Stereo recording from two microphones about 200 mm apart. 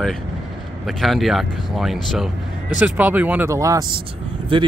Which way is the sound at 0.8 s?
Centre (ahead or behind).